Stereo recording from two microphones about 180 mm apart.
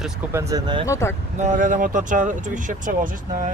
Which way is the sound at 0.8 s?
15° left (ahead or behind).